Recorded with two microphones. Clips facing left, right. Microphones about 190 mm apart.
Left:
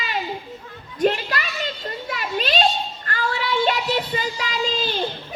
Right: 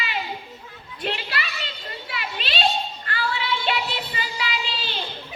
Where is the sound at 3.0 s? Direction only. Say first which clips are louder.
Left 5 dB; 45° left (ahead or behind).